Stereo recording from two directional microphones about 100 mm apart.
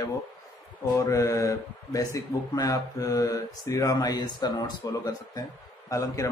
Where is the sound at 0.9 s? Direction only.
30° left (ahead or behind).